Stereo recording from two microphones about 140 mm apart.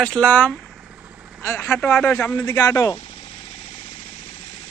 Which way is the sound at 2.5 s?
25° left (ahead or behind).